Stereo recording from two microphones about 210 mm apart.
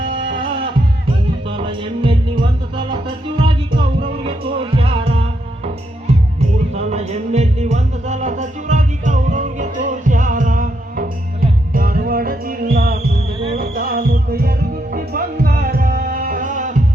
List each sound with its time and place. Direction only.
0.0 s music: 25° right (ahead or behind); by 12.5 s 45° right (ahead or behind)
12.7 s heart sounds: 45° right (ahead or behind)
13.6 s music: 45° right (ahead or behind)